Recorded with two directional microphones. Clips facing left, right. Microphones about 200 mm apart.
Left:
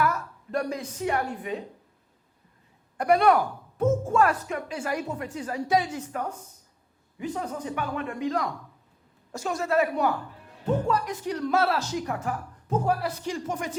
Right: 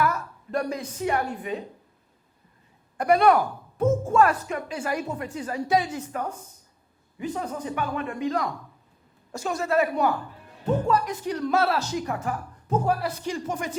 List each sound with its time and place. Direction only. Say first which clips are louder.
0.0 s a woman's voice: right 1 dB; 15° right (ahead or behind)
3.0 s speech: right 1 dB; 10° right (ahead or behind)
3.4 s speech: right 1 dB; 25° right (ahead or behind)